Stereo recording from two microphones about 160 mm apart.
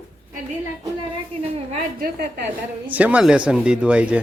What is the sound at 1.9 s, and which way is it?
Speech, 65° right (ahead or behind).